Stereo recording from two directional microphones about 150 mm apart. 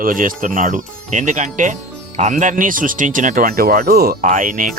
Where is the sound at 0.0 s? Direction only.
65° right (ahead or behind).